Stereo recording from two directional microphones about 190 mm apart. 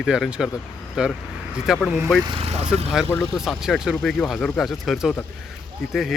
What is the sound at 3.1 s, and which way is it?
Speech, centre (ahead or behind).